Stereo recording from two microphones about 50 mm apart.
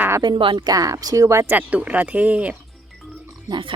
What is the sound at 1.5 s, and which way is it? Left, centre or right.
Speech, right.